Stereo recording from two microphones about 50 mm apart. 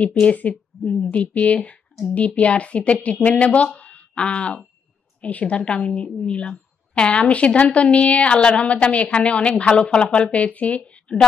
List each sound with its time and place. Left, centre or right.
0.0 s a woman's voice: left